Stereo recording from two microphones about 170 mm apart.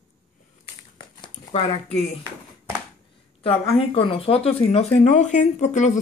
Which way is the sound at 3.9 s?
30° left (ahead or behind).